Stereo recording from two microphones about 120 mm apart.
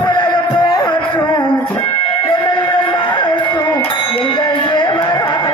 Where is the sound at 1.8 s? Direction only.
40° left (ahead or behind).